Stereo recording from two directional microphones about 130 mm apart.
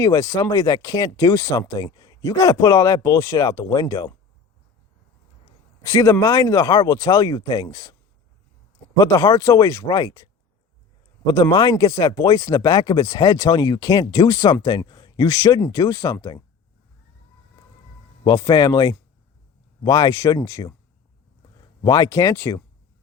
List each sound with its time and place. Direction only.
0.0 s speech: 25° left (ahead or behind)
5.8 s speech: 25° left (ahead or behind)
9.0 s speech: 25° left (ahead or behind)
11.3 s speech: 30° left (ahead or behind)
18.3 s speech: 30° left (ahead or behind)
21.8 s speech: 30° left (ahead or behind)